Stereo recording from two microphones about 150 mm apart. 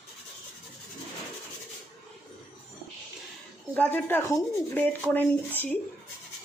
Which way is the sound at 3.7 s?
10° left (ahead or behind).